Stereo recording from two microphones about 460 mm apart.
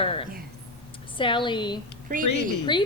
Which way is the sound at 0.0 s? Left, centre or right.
Centre.